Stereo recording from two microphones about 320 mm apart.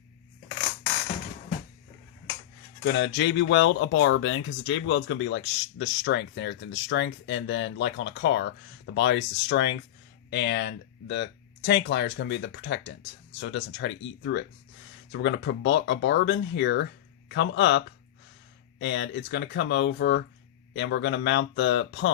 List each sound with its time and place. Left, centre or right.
2.8 s speech: left